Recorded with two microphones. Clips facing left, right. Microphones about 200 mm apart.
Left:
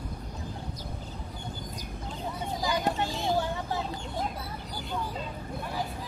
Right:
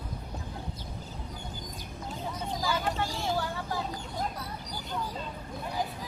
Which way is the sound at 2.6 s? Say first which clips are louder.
Left 2 dB; 15° left (ahead or behind).